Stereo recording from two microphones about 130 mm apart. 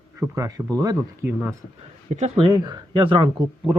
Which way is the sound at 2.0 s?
60° right (ahead or behind).